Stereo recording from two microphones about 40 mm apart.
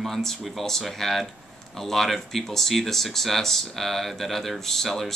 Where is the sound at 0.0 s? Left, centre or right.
Centre.